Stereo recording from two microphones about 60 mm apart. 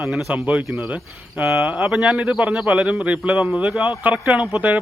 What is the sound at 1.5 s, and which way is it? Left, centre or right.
A man's voice, centre.